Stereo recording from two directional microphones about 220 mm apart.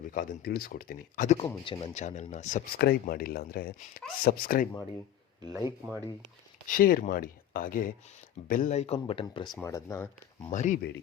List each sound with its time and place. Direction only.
0.1 s speech: 40° left (ahead or behind)
1.6 s speech: 25° left (ahead or behind); by 4.7 s 40° left (ahead or behind)
5.6 s speech: 5° right (ahead or behind)
6.7 s speech: 40° left (ahead or behind); by 9.5 s 20° left (ahead or behind)
9.5 s speech: 10° left (ahead or behind)
10.5 s speech: 35° left (ahead or behind)